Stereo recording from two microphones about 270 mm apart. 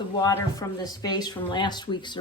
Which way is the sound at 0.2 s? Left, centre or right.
Centre.